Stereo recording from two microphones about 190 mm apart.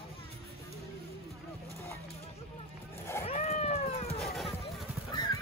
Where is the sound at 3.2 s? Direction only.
30° left (ahead or behind).